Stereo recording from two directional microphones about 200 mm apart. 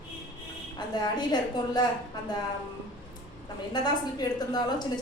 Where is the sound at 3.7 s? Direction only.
20° left (ahead or behind).